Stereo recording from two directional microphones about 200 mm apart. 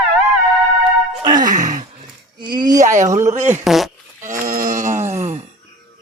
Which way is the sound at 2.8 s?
35° right (ahead or behind).